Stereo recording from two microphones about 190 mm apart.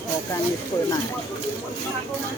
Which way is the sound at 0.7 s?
15° left (ahead or behind).